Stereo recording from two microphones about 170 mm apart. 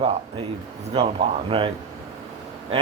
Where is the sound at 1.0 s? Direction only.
35° right (ahead or behind).